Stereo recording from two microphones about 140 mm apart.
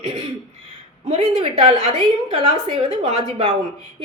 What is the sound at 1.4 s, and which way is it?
A woman's voice, 45° right (ahead or behind).